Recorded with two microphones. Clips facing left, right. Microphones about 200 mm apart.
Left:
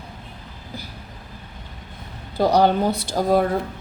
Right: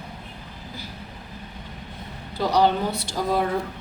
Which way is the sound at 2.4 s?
50° left (ahead or behind).